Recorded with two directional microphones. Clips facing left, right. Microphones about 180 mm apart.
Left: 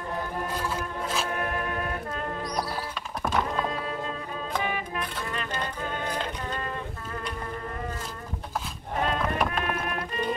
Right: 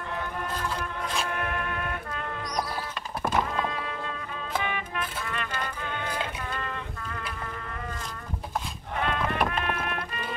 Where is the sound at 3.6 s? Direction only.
35° left (ahead or behind).